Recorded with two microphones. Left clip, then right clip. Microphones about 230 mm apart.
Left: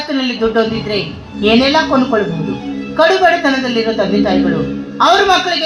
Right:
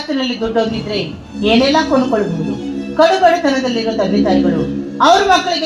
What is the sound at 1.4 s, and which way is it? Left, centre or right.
A woman's voice, left.